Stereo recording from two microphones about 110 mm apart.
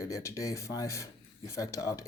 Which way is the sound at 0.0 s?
30° left (ahead or behind).